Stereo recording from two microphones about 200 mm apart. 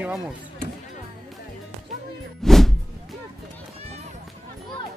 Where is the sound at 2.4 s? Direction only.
Centre (ahead or behind).